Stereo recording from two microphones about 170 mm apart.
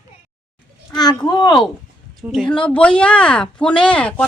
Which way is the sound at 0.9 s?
25° left (ahead or behind).